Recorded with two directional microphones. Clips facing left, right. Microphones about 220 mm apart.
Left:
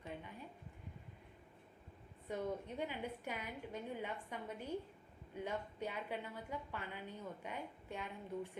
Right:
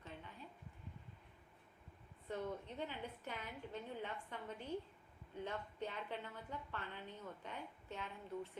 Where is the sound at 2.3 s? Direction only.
10° left (ahead or behind).